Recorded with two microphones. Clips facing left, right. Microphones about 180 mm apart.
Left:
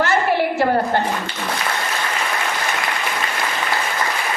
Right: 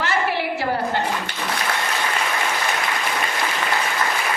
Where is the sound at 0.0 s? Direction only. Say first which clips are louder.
Left 5 dB; 45° left (ahead or behind).